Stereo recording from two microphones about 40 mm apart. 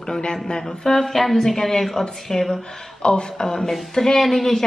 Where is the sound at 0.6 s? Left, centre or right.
Centre.